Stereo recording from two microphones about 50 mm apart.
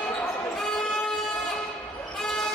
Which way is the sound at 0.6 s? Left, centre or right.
Centre.